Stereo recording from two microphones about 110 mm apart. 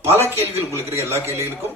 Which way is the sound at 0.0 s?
20° right (ahead or behind).